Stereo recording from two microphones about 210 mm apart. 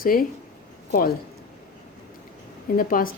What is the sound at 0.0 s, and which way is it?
A man's voice, 45° left (ahead or behind).